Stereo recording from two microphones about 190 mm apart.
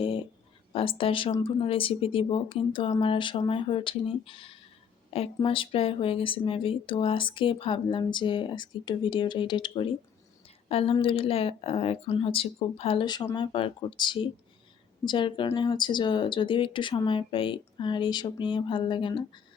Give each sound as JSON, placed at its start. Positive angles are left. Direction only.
{"t": 0.7, "sound": "speech", "side_deg": 30}